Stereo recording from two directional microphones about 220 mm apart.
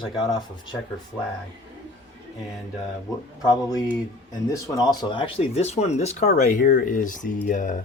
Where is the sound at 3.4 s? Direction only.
15° left (ahead or behind).